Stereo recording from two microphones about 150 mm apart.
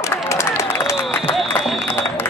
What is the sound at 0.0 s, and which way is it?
Run, 20° left (ahead or behind).